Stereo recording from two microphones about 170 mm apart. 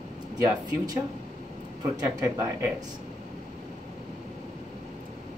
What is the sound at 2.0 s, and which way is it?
Speech, 20° right (ahead or behind).